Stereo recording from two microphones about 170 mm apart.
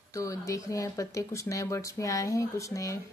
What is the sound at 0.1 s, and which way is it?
Speech, 20° left (ahead or behind).